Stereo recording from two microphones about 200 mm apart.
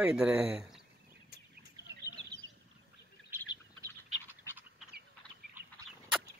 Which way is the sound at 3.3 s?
10° right (ahead or behind).